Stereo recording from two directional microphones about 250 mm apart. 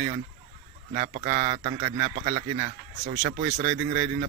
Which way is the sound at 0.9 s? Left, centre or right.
Right.